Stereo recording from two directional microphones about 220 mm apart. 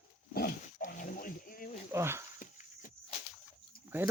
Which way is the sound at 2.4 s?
35° left (ahead or behind).